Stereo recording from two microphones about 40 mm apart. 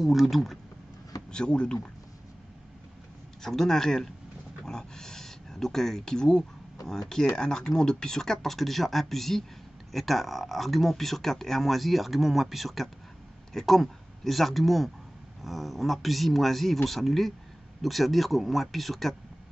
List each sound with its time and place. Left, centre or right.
0.0 s speech: centre
1.3 s speech: left
3.4 s speech: centre